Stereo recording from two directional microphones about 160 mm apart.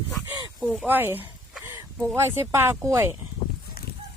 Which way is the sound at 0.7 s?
10° right (ahead or behind).